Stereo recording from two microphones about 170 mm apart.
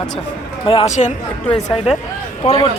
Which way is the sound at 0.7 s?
35° left (ahead or behind).